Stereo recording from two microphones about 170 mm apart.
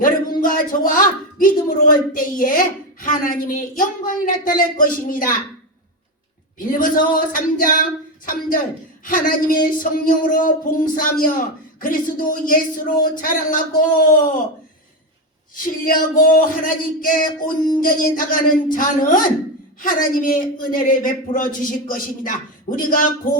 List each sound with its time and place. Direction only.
0.0 s a man's voice: 55° left (ahead or behind)
6.6 s a man's voice: 55° left (ahead or behind)
7.6 s a sound: 55° left (ahead or behind)
9.0 s a man's voice: 55° left (ahead or behind)
15.5 s a man's voice: 55° left (ahead or behind)